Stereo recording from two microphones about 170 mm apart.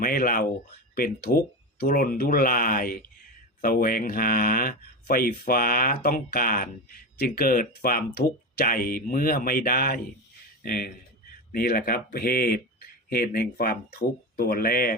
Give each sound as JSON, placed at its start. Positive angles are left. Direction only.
{"t": 0.0, "sound": "speech", "side_deg": 60}